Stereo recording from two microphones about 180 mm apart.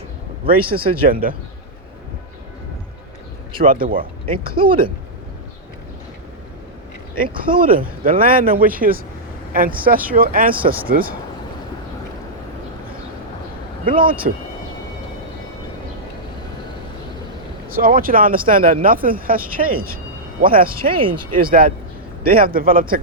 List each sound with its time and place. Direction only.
0.4 s speech: 55° right (ahead or behind)
3.6 s speech: 50° right (ahead or behind)
4.5 s speech: 30° right (ahead or behind)
7.2 s speech: 50° right (ahead or behind)
13.8 s speech: 50° right (ahead or behind)
17.7 s speech: 55° right (ahead or behind)
20.9 s speech: 30° right (ahead or behind)
21.3 s speech: 50° right (ahead or behind)